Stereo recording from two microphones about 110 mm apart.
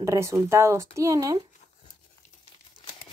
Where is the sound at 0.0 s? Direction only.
25° right (ahead or behind).